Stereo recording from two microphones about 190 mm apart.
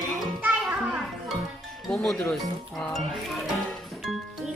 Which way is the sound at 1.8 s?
Centre (ahead or behind).